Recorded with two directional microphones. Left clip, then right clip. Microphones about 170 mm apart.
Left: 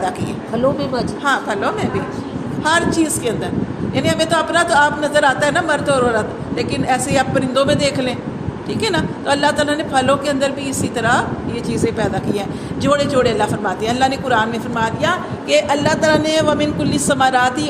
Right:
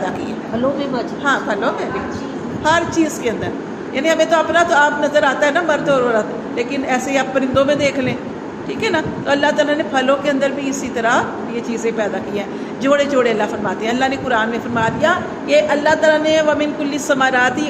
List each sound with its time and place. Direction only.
1.2 s a man's voice: 40° left (ahead or behind)